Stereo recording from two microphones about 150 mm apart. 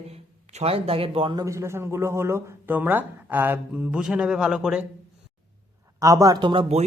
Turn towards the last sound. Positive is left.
turn(degrees=-40)  # may be behind; listen again after turning